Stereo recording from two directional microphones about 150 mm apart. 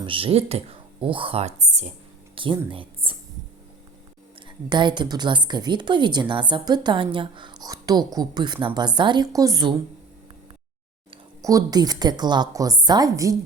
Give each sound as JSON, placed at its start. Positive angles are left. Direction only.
{"t": 0.0, "sound": "speech", "side_deg": -35}
{"t": 2.3, "sound": "speech", "side_deg": -35}
{"t": 2.6, "sound": "a sound", "side_deg": -35}
{"t": 4.4, "sound": "a woman's voice", "side_deg": -30}
{"t": 11.4, "sound": "a woman's voice", "side_deg": -25}